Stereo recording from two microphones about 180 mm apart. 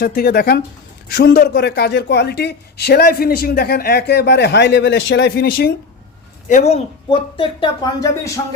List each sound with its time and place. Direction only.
0.0 s speech: 60° left (ahead or behind)
6.5 s speech: 35° left (ahead or behind)